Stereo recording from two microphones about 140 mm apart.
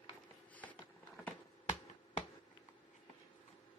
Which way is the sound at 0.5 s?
10° left (ahead or behind).